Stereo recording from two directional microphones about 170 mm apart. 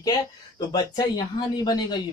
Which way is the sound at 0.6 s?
25° left (ahead or behind).